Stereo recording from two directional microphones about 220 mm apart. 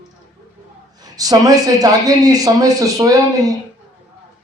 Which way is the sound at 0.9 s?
15° right (ahead or behind).